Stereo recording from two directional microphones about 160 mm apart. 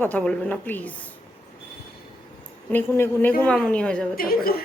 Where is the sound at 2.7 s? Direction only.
15° left (ahead or behind).